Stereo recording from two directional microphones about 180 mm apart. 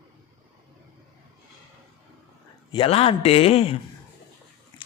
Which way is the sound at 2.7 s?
30° left (ahead or behind).